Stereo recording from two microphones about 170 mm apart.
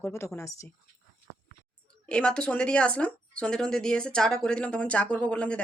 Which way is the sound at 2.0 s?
5° left (ahead or behind).